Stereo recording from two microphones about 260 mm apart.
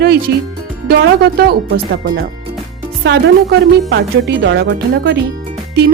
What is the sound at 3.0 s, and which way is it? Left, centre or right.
Speech, right.